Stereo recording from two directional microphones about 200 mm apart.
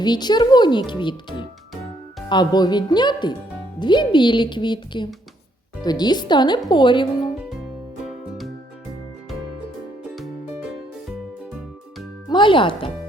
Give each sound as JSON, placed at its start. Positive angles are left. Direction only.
{"t": 0.0, "sound": "a child's voice", "side_deg": 20}
{"t": 12.3, "sound": "music", "side_deg": 25}